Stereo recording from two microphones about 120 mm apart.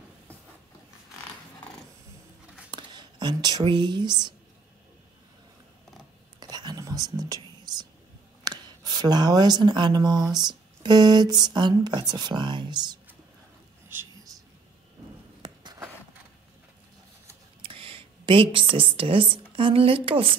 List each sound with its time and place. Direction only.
2.7 s speech: 40° right (ahead or behind)
6.4 s whispering: 35° right (ahead or behind)
8.5 s speech: 35° right (ahead or behind)
15.4 s a sound: 35° right (ahead or behind)
17.6 s speech: 50° right (ahead or behind)